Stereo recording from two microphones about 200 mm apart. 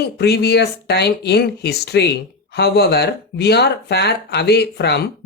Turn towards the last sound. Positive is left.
turn(degrees=55)  # may be behind; listen again after turning